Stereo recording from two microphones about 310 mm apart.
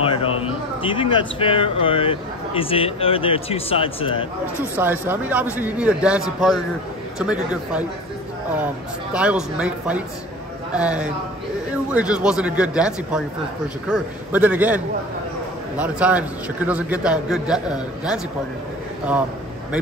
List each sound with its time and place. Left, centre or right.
0.0 s speech: centre
4.7 s a man's voice: centre
9.1 s a man's voice: centre
15.8 s a man's voice: centre